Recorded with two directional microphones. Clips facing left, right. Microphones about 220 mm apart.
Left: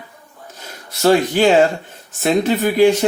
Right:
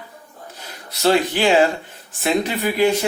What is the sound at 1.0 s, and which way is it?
Speech, 45° left (ahead or behind).